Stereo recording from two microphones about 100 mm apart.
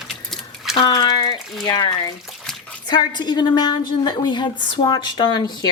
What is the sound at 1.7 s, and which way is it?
A woman's voice, 40° left (ahead or behind).